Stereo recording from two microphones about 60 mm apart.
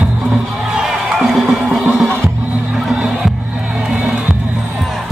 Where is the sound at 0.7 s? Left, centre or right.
Centre.